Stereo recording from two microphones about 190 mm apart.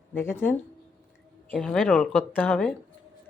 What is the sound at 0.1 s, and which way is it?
A woman's voice, 10° left (ahead or behind).